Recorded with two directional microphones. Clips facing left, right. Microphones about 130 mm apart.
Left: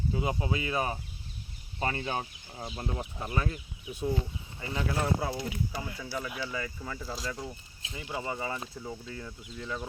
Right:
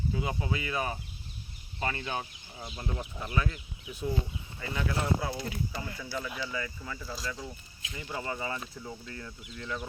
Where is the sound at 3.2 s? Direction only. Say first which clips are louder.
Even; 40° left (ahead or behind).